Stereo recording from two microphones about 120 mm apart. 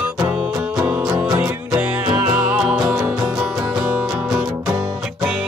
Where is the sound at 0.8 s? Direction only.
10° right (ahead or behind).